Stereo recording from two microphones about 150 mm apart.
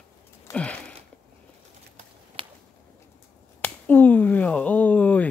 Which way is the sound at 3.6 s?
10° left (ahead or behind).